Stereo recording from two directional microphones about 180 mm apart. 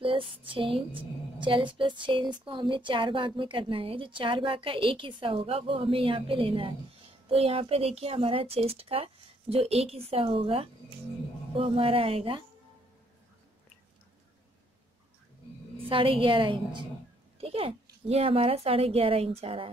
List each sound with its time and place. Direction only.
0.0 s a woman's voice: 30° right (ahead or behind)
15.9 s a woman's voice: 30° right (ahead or behind)